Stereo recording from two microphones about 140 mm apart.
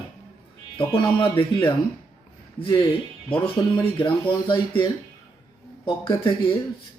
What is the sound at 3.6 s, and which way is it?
Speech, 35° left (ahead or behind).